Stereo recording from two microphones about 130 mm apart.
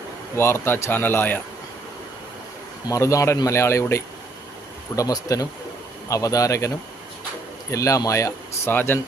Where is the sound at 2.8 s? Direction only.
25° left (ahead or behind).